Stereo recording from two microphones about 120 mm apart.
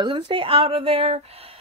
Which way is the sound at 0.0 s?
45° right (ahead or behind).